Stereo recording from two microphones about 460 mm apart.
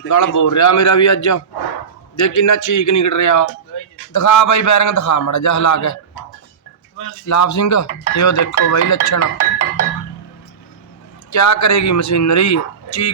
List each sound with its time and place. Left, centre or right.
0.1 s speech: left
7.3 s speech: left
11.3 s speech: left